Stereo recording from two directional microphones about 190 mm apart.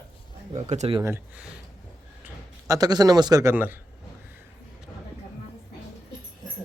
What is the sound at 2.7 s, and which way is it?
A man's voice, 20° right (ahead or behind).